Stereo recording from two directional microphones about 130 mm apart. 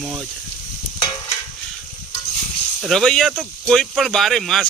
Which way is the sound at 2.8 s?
Centre (ahead or behind).